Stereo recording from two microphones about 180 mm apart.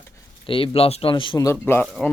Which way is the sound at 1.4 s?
10° left (ahead or behind).